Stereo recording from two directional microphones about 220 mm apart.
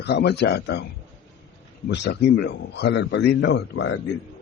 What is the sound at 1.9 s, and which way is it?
A man's voice, 50° left (ahead or behind).